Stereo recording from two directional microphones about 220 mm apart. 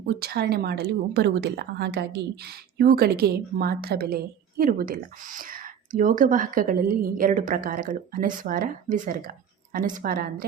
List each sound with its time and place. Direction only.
0.0 s a woman's voice: 45° right (ahead or behind)